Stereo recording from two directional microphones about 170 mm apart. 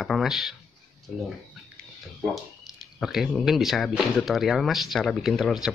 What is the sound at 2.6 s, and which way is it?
Speech, 5° right (ahead or behind).